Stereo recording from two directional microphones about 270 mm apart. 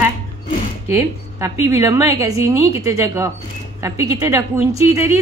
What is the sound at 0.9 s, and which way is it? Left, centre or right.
A woman's voice, centre.